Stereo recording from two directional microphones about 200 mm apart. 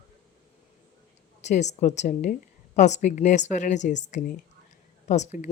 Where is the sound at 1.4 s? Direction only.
35° left (ahead or behind).